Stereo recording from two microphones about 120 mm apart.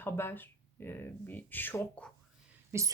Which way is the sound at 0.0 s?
20° left (ahead or behind).